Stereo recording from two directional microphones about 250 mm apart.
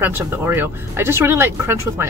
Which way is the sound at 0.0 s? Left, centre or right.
Centre.